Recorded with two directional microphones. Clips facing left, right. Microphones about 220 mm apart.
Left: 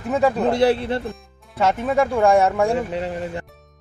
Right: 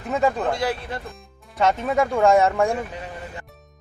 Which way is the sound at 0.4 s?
30° left (ahead or behind).